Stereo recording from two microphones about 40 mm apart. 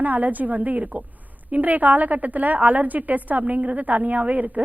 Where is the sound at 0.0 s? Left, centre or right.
Right.